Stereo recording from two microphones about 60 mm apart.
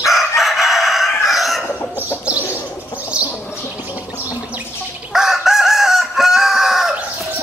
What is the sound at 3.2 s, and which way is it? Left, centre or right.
Bird, centre.